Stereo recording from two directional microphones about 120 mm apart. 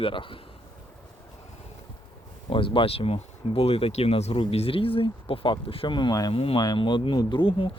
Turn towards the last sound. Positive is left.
turn(degrees=45)  # may be behind; listen again after turning